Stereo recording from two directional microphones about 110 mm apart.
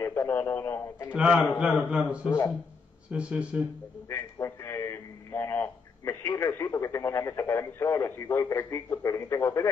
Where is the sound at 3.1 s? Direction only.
10° right (ahead or behind).